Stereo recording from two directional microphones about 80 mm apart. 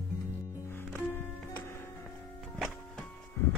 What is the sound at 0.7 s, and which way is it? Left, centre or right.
Music, left.